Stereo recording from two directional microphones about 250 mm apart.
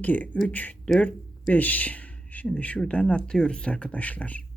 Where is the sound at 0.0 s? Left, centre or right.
Centre.